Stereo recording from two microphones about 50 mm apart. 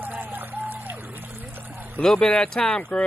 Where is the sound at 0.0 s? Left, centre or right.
Right.